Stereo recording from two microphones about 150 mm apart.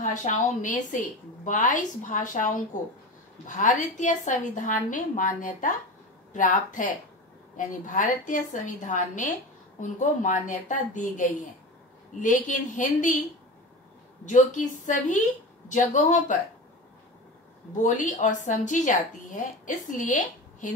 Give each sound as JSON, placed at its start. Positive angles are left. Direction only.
{"t": 0.0, "sound": "a woman's voice", "side_deg": 55}
{"t": 14.2, "sound": "a woman's voice", "side_deg": 55}
{"t": 17.8, "sound": "a woman's voice", "side_deg": 55}